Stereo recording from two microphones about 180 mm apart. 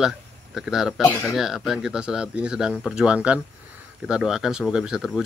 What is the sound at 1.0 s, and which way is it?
Speech, 15° left (ahead or behind).